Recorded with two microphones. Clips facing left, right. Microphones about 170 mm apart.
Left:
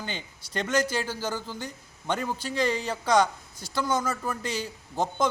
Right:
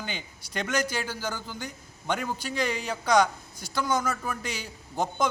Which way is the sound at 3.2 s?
25° left (ahead or behind).